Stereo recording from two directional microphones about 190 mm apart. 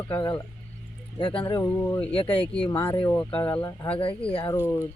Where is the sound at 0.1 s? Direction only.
25° left (ahead or behind).